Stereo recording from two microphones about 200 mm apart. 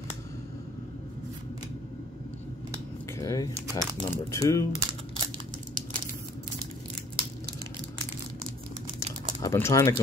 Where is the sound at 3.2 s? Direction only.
15° left (ahead or behind).